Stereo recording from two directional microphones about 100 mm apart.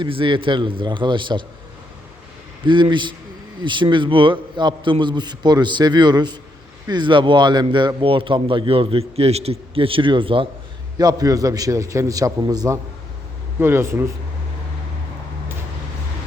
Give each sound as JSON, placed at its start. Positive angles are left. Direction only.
{"t": 0.0, "sound": "a man's voice", "side_deg": -55}
{"t": 2.6, "sound": "a man's voice", "side_deg": -50}
{"t": 10.9, "sound": "a man's voice", "side_deg": -40}
{"t": 13.6, "sound": "speech", "side_deg": -20}